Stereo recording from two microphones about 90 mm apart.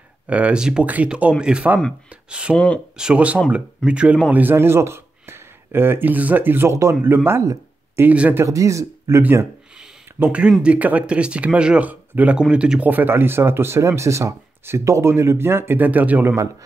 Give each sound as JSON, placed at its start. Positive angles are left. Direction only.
{"t": 0.3, "sound": "speech", "side_deg": -15}
{"t": 2.5, "sound": "speech", "side_deg": 15}
{"t": 3.0, "sound": "speech", "side_deg": -10}
{"t": 8.1, "sound": "speech", "side_deg": -15}
{"t": 8.4, "sound": "speech", "side_deg": -35}
{"t": 12.9, "sound": "speech", "side_deg": -25}